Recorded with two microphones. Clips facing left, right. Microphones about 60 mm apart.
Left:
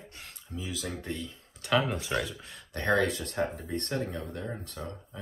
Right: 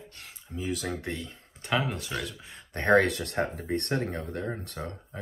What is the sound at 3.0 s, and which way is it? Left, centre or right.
Speech, right.